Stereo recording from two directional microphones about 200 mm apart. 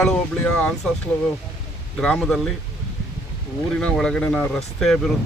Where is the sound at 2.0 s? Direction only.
5° left (ahead or behind).